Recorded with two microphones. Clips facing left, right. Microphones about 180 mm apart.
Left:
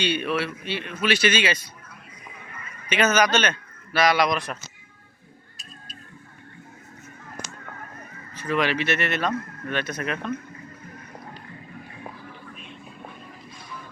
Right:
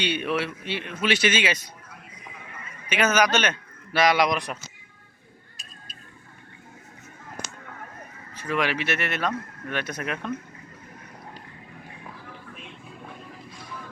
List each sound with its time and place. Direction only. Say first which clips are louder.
0.0 s speech: left 1 dB; 20° right (ahead or behind)
2.9 s speech: left 1 dB; 10° right (ahead or behind)
8.4 s speech: left 2 dB; 10° right (ahead or behind)